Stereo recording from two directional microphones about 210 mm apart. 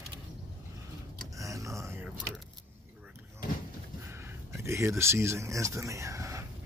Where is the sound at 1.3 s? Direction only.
15° right (ahead or behind).